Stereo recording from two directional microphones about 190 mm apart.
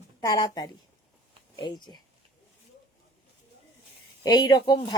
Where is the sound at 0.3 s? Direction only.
20° left (ahead or behind).